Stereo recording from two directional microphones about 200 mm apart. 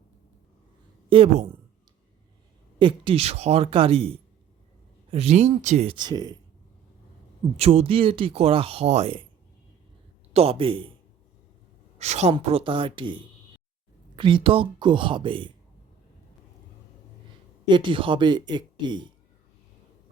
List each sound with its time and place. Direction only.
1.1 s speech: 30° right (ahead or behind)
2.7 s speech: 25° right (ahead or behind)
7.5 s speech: 30° right (ahead or behind)
10.3 s speech: 30° right (ahead or behind)
11.9 s speech: 35° right (ahead or behind)
17.7 s speech: 25° right (ahead or behind)